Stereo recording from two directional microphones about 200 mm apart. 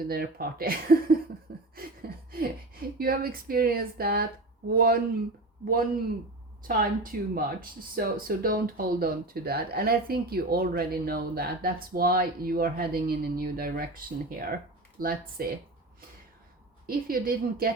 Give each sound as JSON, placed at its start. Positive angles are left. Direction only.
{"t": 0.0, "sound": "speech", "side_deg": -50}
{"t": 1.7, "sound": "a sound", "side_deg": -50}
{"t": 3.0, "sound": "speech", "side_deg": -45}
{"t": 6.7, "sound": "speech", "side_deg": -45}
{"t": 16.8, "sound": "speech", "side_deg": -45}